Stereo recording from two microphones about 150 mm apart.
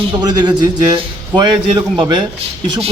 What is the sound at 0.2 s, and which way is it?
Speech, 30° right (ahead or behind).